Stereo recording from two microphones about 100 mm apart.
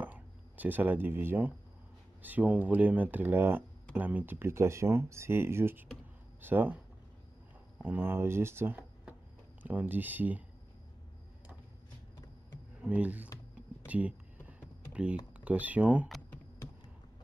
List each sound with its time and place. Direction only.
0.0 s a sound: 15° right (ahead or behind)
2.2 s speech: 15° right (ahead or behind)
7.8 s speech: 20° right (ahead or behind)
12.8 s speech: 15° right (ahead or behind)
14.9 s typing: 10° right (ahead or behind)
15.3 s speech: 15° right (ahead or behind)